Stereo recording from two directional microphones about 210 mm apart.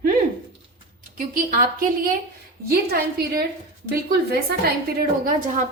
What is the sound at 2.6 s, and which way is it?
Speech, 45° right (ahead or behind).